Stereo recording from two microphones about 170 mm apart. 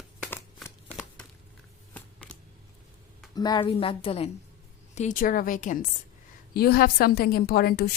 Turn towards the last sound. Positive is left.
turn(degrees=65)  # may be behind; listen again after turning